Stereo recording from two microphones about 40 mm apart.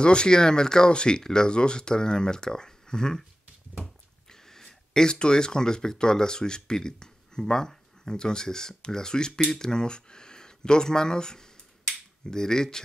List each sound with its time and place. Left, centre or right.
0.0 s speech: left